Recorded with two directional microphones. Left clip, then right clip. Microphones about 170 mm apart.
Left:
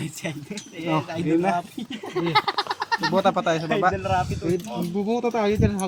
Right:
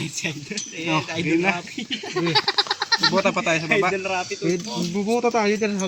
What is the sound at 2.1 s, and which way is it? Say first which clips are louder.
Speech: right 1 dB; 40° left (ahead or behind).